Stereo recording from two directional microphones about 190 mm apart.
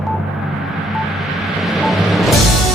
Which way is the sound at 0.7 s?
Centre (ahead or behind).